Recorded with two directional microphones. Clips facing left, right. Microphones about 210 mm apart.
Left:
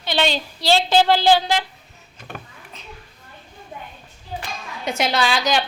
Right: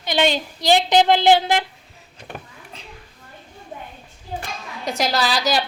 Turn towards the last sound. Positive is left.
turn(degrees=0)  # may be behind; listen again after turning